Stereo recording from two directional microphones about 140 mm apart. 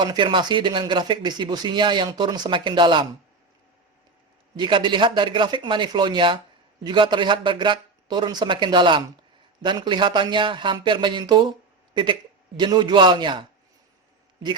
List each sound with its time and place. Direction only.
0.0 s speech: 35° right (ahead or behind)
4.5 s speech: 35° right (ahead or behind)
12.5 s speech: 35° right (ahead or behind)